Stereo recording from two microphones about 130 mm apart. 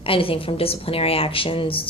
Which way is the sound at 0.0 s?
45° left (ahead or behind).